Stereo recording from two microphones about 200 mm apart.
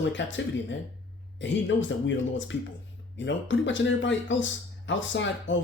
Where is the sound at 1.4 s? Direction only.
65° left (ahead or behind).